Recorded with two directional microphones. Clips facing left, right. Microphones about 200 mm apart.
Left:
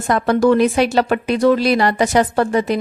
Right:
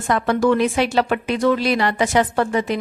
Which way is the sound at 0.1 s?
40° left (ahead or behind).